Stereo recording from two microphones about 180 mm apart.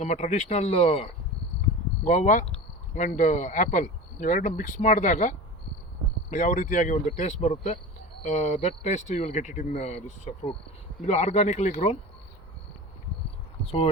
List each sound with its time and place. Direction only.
0.0 s speech: 40° left (ahead or behind)
6.3 s speech: 45° left (ahead or behind)
13.7 s speech: 35° left (ahead or behind)